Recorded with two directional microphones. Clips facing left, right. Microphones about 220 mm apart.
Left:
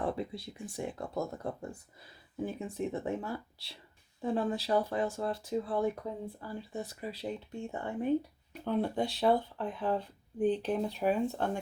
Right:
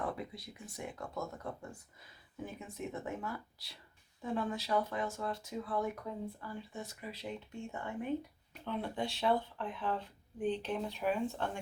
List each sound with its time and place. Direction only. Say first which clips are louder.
0.0 s speech: left 5 dB; 30° left (ahead or behind)